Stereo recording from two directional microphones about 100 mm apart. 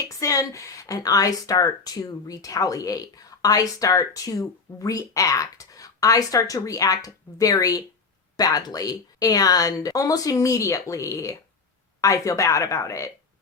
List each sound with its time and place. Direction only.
0.2 s a woman's voice: 35° left (ahead or behind)